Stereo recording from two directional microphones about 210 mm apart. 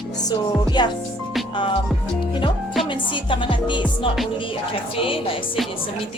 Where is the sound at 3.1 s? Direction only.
25° left (ahead or behind).